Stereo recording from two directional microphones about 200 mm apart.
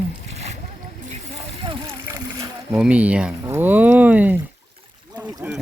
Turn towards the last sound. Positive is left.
turn(degrees=-10)  # may be behind; listen again after turning